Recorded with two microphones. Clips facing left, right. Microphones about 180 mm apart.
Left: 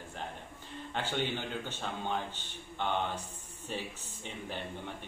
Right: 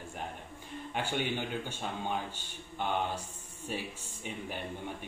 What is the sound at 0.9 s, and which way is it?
A man's voice, 10° right (ahead or behind).